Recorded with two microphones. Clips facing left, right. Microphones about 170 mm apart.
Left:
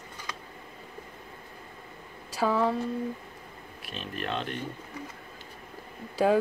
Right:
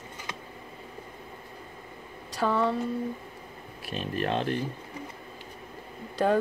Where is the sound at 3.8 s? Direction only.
40° right (ahead or behind).